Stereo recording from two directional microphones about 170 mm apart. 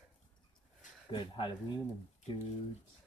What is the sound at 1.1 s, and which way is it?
Speech, 30° left (ahead or behind).